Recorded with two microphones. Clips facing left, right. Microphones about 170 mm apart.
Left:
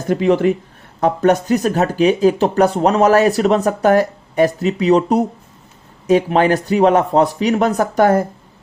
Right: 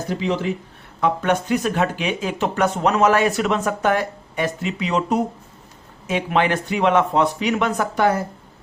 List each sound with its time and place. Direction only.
0.1 s speech: 55° left (ahead or behind)
0.9 s speech: 40° left (ahead or behind)